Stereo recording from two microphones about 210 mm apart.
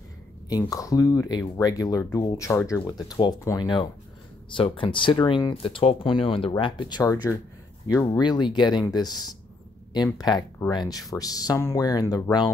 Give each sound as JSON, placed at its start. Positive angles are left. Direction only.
{"t": 0.5, "sound": "speech", "side_deg": 15}